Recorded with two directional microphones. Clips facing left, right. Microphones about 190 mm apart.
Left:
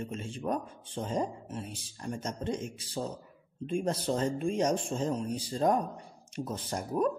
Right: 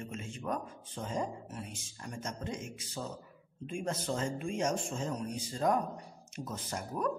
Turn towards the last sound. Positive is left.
turn(degrees=30)  # may be behind; listen again after turning